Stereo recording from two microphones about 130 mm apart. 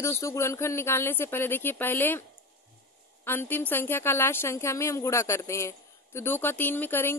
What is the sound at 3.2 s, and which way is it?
Speech, 15° left (ahead or behind).